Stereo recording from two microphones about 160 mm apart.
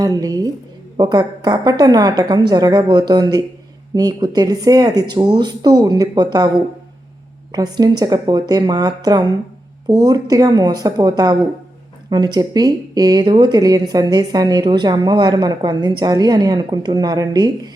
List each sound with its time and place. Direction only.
0.2 s speech: 25° right (ahead or behind)